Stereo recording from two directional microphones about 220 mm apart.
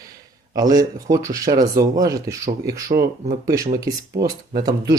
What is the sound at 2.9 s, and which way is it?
Speech, 35° right (ahead or behind).